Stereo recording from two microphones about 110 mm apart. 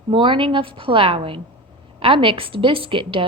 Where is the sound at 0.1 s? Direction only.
50° right (ahead or behind).